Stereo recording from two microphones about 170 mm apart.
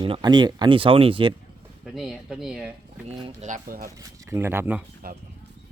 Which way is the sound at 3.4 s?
50° right (ahead or behind).